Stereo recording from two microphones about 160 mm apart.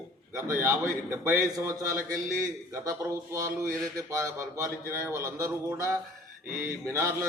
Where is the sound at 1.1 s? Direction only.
20° right (ahead or behind).